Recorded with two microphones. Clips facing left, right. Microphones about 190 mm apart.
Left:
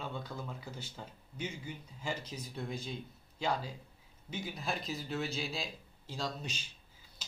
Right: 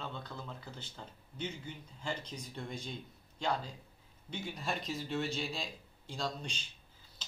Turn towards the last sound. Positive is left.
turn(degrees=5)  # may be behind; listen again after turning